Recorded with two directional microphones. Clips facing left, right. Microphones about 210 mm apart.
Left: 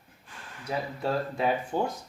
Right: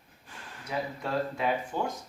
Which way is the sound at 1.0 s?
30° left (ahead or behind).